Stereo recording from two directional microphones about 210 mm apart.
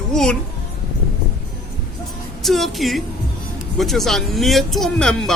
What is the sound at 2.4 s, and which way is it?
Speech, centre (ahead or behind).